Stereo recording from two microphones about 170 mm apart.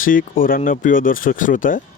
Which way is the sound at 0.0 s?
55° left (ahead or behind).